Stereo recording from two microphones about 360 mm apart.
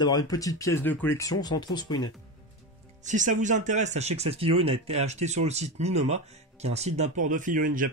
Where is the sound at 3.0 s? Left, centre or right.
Centre.